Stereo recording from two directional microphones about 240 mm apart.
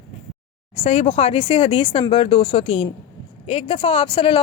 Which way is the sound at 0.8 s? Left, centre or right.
Left.